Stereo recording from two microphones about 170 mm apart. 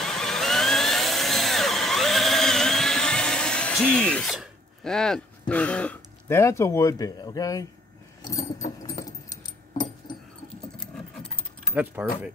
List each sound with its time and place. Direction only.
0.0 s a sound: 5° left (ahead or behind)
5.5 s speech: 5° left (ahead or behind)
8.2 s keys jangling: 20° left (ahead or behind)
9.0 s a sound: 20° left (ahead or behind)
10.8 s keys jangling: 5° left (ahead or behind)
11.7 s speech: 10° right (ahead or behind)